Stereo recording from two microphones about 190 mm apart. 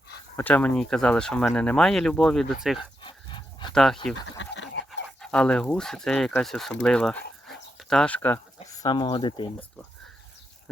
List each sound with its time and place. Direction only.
0.3 s speech: 10° left (ahead or behind)
3.0 s dog: 25° left (ahead or behind)
3.8 s speech: centre (ahead or behind)
4.1 s a sound: 75° left (ahead or behind)
4.9 s speech: 5° left (ahead or behind)
8.6 s speech: 20° left (ahead or behind)